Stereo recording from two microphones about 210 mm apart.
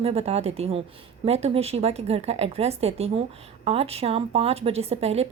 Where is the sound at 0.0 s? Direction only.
30° right (ahead or behind).